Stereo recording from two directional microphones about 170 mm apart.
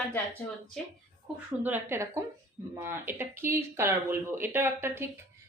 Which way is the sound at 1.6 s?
10° right (ahead or behind).